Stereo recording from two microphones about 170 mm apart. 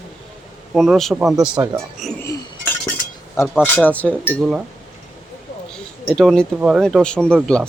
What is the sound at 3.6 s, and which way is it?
Speech, 10° left (ahead or behind).